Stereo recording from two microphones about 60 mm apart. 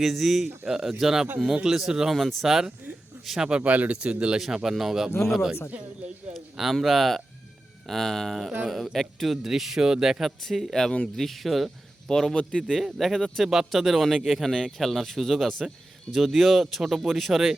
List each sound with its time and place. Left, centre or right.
0.0 s a man's voice: centre
3.5 s speech: right
4.4 s a man's voice: centre
12.7 s a man's voice: centre